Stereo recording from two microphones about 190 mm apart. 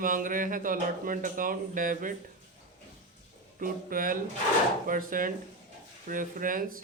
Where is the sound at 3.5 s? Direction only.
45° right (ahead or behind).